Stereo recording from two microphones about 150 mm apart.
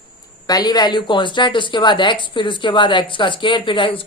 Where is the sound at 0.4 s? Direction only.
25° left (ahead or behind).